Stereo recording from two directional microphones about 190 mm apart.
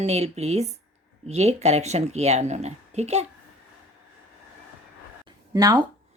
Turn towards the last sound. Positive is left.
turn(degrees=-20)  # may be behind; listen again after turning